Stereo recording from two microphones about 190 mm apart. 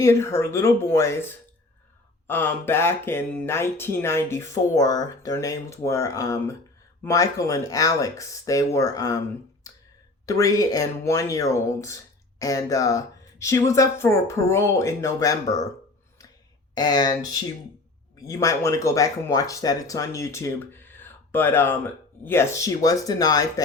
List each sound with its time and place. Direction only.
0.0 s speech: 15° left (ahead or behind)
9.7 s a sound: 20° left (ahead or behind)
10.2 s speech: 15° left (ahead or behind)
16.7 s speech: 20° left (ahead or behind)
18.2 s speech: 20° left (ahead or behind)